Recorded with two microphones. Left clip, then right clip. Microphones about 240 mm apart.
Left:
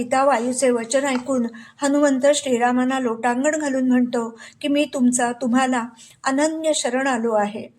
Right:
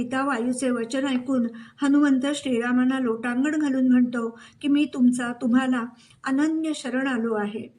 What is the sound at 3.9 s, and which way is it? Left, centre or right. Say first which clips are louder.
A woman's voice: left 3 dB; centre.